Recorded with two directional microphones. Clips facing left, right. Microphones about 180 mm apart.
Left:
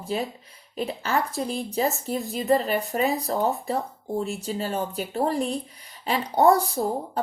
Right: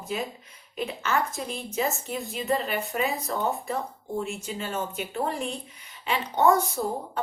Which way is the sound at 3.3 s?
Centre (ahead or behind).